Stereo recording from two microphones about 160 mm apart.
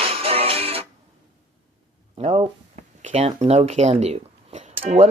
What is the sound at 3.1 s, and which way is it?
Speech, 40° right (ahead or behind).